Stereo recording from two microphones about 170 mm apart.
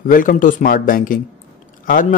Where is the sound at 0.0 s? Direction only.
50° left (ahead or behind).